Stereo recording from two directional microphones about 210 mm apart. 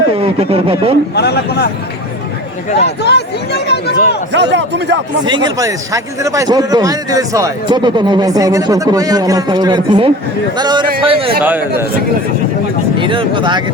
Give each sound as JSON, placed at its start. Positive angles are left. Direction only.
{"t": 0.2, "sound": "speech", "side_deg": -25}
{"t": 1.1, "sound": "speech", "side_deg": 50}
{"t": 2.7, "sound": "speech", "side_deg": 55}
{"t": 4.3, "sound": "a man's voice", "side_deg": -55}
{"t": 5.2, "sound": "a man's voice", "side_deg": -20}
{"t": 11.4, "sound": "a man's voice", "side_deg": -10}
{"t": 13.0, "sound": "speech", "side_deg": -25}